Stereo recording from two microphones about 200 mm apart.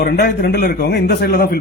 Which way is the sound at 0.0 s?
50° left (ahead or behind).